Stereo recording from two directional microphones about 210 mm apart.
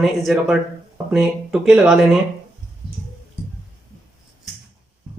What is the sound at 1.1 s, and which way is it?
Speech, 5° right (ahead or behind).